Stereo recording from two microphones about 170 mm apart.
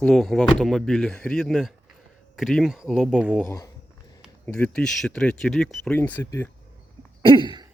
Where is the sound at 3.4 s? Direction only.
20° left (ahead or behind).